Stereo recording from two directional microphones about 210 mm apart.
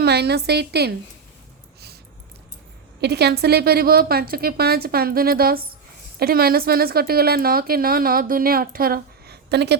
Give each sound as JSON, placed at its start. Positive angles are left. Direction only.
{"t": 0.0, "sound": "a woman's voice", "side_deg": -50}
{"t": 3.0, "sound": "a woman's voice", "side_deg": -50}